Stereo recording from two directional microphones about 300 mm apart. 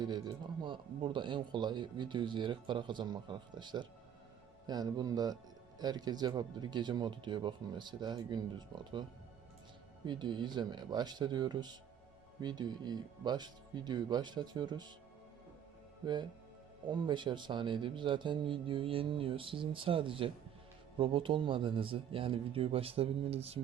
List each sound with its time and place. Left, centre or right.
0.0 s speech: centre
10.1 s speech: centre
16.9 s speech: centre